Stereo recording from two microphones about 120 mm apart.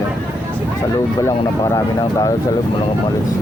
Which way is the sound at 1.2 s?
25° left (ahead or behind).